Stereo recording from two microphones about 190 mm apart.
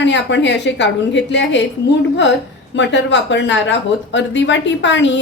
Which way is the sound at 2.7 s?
70° left (ahead or behind).